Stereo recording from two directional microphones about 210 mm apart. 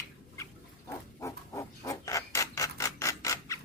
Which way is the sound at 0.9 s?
15° left (ahead or behind).